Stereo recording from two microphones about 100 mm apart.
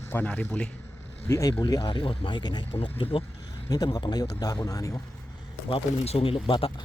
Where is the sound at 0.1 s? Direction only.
15° left (ahead or behind).